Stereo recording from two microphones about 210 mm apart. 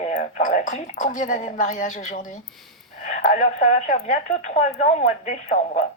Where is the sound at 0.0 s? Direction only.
35° left (ahead or behind).